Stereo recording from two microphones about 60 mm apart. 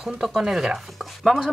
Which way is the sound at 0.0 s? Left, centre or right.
Centre.